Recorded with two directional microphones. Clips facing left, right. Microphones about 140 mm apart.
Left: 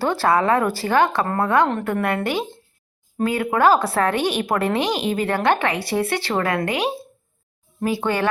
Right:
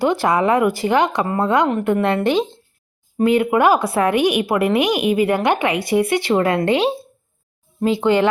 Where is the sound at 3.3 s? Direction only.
20° right (ahead or behind).